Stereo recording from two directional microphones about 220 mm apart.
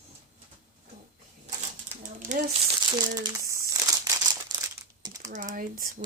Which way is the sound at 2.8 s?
20° right (ahead or behind).